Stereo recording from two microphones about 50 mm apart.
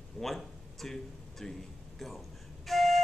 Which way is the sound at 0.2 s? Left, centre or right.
Centre.